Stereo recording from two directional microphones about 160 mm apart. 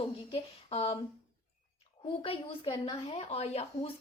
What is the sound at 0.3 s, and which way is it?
Speech, 35° left (ahead or behind).